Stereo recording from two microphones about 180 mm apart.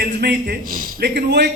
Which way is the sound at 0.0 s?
60° right (ahead or behind).